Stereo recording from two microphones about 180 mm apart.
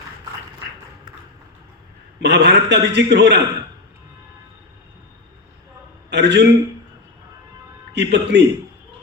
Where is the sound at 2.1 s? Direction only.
70° right (ahead or behind).